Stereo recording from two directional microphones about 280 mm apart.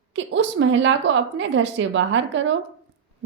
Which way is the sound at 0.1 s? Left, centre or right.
Right.